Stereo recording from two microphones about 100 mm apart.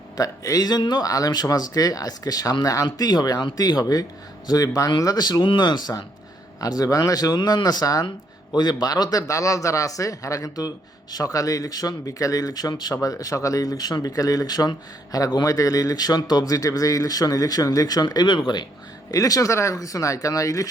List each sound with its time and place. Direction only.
0.2 s speech: 35° left (ahead or behind)
19.1 s speech: 35° left (ahead or behind)